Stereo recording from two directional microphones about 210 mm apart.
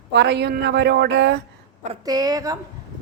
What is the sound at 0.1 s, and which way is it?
A woman's voice, 55° right (ahead or behind).